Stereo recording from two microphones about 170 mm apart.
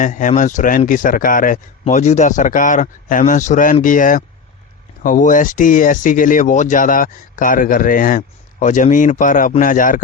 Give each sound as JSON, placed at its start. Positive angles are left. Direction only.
{"t": 0.0, "sound": "speech", "side_deg": 50}